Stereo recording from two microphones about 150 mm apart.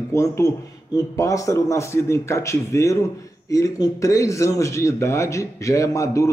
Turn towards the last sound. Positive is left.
turn(degrees=20)  # may be behind; listen again after turning